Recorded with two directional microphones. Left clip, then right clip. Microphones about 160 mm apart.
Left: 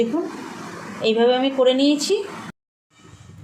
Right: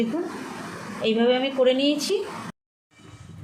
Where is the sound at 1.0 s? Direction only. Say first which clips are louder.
Left 4 dB; 35° left (ahead or behind).